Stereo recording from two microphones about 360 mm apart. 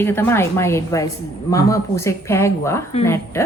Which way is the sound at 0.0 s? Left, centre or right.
Centre.